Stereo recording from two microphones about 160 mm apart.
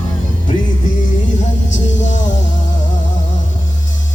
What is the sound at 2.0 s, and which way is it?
Music, 50° left (ahead or behind).